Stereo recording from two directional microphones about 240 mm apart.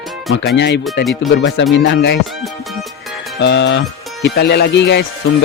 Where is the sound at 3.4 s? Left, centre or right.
Left.